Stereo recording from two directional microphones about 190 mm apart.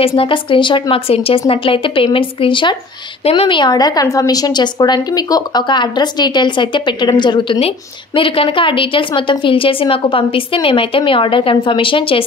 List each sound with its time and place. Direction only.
0.0 s a woman's voice: 30° left (ahead or behind)